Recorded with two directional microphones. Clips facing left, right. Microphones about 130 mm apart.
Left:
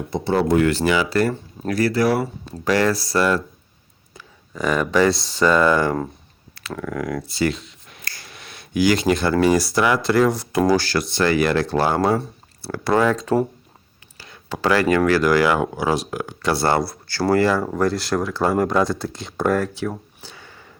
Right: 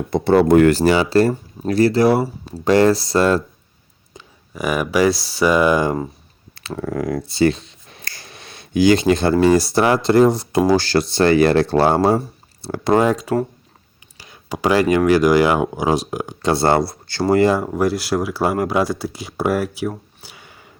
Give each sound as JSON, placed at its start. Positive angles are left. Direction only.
{"t": 0.1, "sound": "speech", "side_deg": -60}
{"t": 0.8, "sound": "speech", "side_deg": -35}
{"t": 4.5, "sound": "speech", "side_deg": -10}
{"t": 6.5, "sound": "finger snapping", "side_deg": -25}
{"t": 9.4, "sound": "speech", "side_deg": -25}
{"t": 17.7, "sound": "speech", "side_deg": -5}
{"t": 20.2, "sound": "a sound", "side_deg": -15}